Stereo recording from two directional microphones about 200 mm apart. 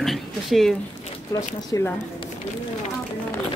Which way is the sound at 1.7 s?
15° left (ahead or behind).